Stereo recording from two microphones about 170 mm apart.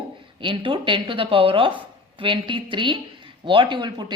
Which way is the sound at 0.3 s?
30° right (ahead or behind).